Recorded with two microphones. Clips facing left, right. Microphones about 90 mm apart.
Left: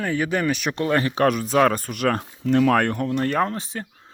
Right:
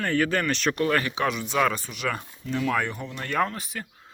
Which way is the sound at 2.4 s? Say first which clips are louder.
Left 8 dB; 80° left.